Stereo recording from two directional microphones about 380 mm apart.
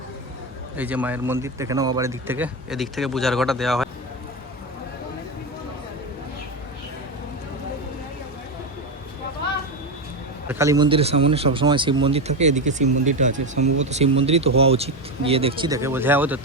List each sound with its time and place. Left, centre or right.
0.8 s a man's voice: centre
10.5 s speech: centre